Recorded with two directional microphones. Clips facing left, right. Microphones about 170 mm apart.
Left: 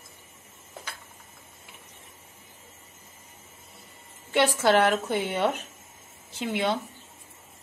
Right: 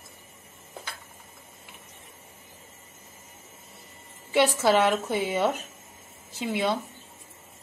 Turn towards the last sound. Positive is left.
turn(degrees=-5)  # may be behind; listen again after turning